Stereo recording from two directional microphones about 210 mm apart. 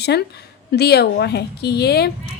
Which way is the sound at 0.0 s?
50° left (ahead or behind).